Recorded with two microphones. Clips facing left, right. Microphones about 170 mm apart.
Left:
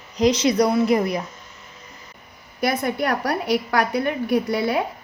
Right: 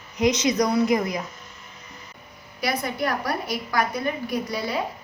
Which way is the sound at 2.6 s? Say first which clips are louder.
Left 4 dB; 55° left (ahead or behind).